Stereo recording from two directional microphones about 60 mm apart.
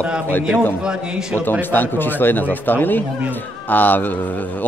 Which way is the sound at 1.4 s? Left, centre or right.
Left.